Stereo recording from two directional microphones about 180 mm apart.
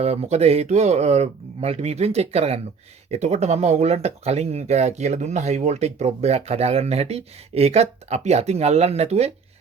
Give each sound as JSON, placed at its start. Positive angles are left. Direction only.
{"t": 0.0, "sound": "speech", "side_deg": -35}